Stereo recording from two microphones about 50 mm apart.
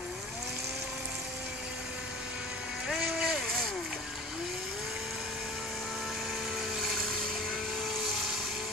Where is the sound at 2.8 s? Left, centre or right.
Centre.